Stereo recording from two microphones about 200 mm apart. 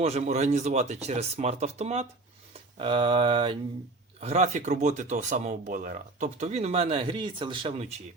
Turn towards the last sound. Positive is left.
turn(degrees=-30)  # may be behind; listen again after turning